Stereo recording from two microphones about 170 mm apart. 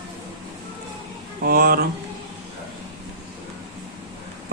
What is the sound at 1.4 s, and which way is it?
Speech, 60° right (ahead or behind).